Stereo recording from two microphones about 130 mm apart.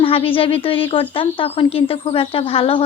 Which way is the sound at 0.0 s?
45° left (ahead or behind).